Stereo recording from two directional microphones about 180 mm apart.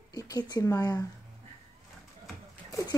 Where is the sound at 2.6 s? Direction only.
20° left (ahead or behind).